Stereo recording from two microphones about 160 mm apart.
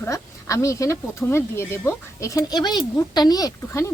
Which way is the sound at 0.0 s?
20° left (ahead or behind).